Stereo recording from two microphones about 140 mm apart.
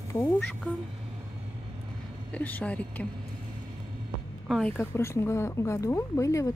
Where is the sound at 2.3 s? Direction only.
10° left (ahead or behind).